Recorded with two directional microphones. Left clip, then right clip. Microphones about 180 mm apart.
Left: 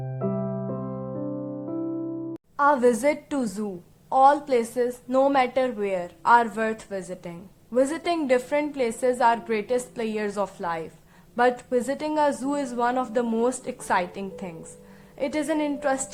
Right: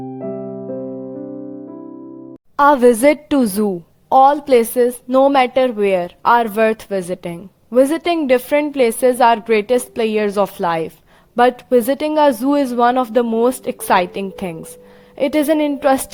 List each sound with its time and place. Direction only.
2.6 s a woman's voice: 50° right (ahead or behind)